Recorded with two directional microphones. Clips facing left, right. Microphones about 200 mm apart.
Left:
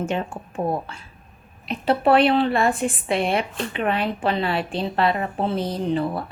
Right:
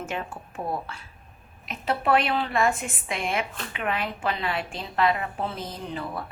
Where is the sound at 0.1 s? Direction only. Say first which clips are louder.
Left 6 dB; 30° left (ahead or behind).